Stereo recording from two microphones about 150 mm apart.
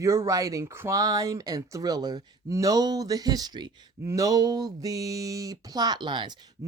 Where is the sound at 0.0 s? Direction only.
20° right (ahead or behind).